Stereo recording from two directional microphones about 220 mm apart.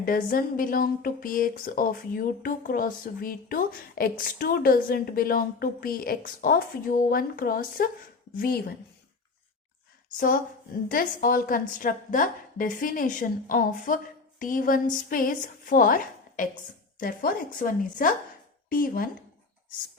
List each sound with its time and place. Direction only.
0.0 s a woman's voice: 40° left (ahead or behind)
10.8 s a woman's voice: 40° left (ahead or behind)